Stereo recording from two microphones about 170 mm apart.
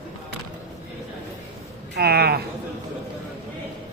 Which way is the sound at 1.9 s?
65° right (ahead or behind).